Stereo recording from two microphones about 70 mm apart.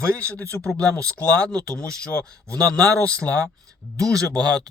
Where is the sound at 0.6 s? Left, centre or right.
Centre.